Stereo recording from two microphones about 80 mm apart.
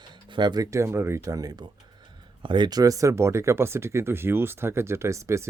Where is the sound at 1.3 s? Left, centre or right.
Right.